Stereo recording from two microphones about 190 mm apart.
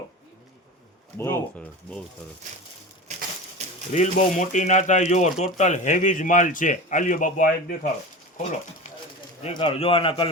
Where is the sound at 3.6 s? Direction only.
35° right (ahead or behind).